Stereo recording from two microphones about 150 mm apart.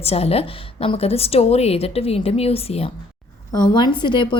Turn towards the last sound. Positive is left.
turn(degrees=30)  # may be behind; listen again after turning